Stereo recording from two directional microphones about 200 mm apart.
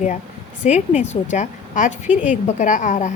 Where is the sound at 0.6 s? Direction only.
35° left (ahead or behind).